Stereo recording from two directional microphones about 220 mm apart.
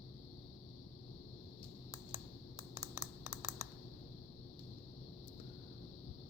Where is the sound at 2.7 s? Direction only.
10° right (ahead or behind).